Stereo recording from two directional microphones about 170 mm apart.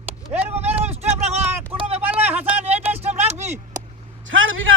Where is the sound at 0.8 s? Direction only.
40° right (ahead or behind).